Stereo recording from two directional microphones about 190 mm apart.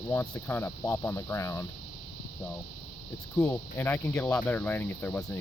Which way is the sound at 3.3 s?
10° left (ahead or behind).